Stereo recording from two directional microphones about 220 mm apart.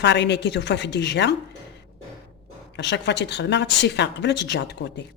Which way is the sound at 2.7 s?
50° left (ahead or behind).